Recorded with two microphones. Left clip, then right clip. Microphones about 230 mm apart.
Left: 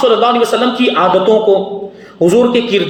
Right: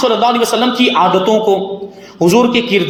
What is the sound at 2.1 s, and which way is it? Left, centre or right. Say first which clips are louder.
Speech: left 1 dB; right.